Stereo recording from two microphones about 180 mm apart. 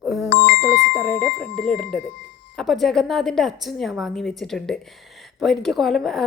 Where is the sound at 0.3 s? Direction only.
65° left (ahead or behind).